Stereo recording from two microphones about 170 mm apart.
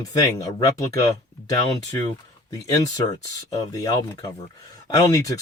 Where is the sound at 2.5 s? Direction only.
20° left (ahead or behind).